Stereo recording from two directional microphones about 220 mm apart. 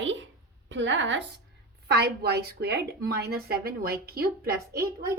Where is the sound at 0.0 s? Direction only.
55° right (ahead or behind).